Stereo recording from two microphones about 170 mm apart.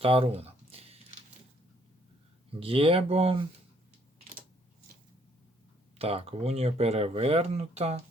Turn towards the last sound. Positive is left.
turn(degrees=-40)  # may be behind; listen again after turning